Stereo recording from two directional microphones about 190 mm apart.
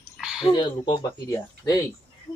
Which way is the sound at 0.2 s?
Centre (ahead or behind).